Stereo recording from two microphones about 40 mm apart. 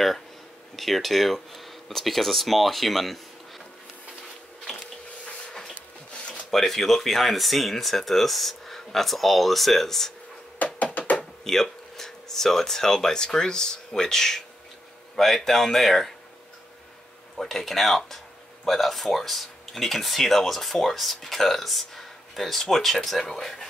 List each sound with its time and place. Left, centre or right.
0.7 s speech: centre
6.1 s a sound: left
6.5 s speech: centre
11.0 s a sound: left
11.4 s speech: centre
17.4 s speech: centre